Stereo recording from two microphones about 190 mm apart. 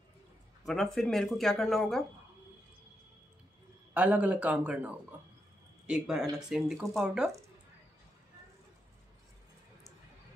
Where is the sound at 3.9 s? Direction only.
10° right (ahead or behind).